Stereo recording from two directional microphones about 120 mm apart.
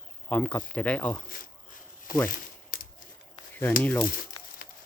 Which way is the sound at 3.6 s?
20° left (ahead or behind).